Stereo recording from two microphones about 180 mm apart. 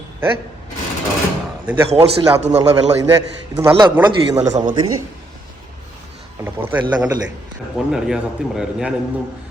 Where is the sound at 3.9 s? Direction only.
10° right (ahead or behind).